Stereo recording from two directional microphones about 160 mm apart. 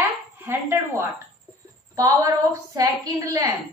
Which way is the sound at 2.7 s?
20° right (ahead or behind).